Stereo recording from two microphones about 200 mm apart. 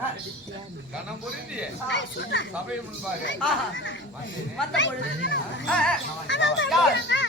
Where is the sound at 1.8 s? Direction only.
65° left (ahead or behind).